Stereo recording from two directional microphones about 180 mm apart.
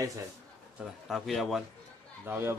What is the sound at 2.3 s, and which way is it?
Speech, 10° right (ahead or behind).